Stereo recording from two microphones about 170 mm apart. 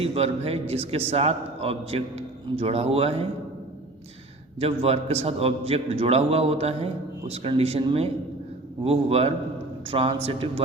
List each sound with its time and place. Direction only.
0.0 s a man's voice: 35° right (ahead or behind)
4.6 s a man's voice: 35° right (ahead or behind)